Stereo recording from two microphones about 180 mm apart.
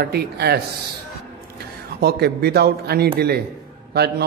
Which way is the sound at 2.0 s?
60° right (ahead or behind).